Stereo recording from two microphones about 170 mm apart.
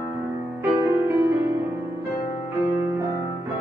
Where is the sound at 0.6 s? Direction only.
15° right (ahead or behind).